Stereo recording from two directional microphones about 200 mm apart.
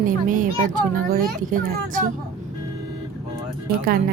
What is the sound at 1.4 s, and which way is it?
Speech, 40° right (ahead or behind).